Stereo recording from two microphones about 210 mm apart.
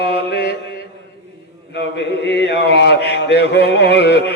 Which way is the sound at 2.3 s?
55° left (ahead or behind).